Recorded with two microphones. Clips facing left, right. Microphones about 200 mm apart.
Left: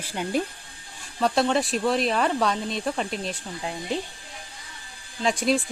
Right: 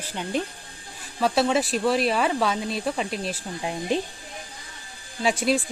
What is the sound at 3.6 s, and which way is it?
Speech, 15° right (ahead or behind).